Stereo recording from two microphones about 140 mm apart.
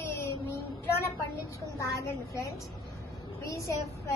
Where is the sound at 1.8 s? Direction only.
20° left (ahead or behind).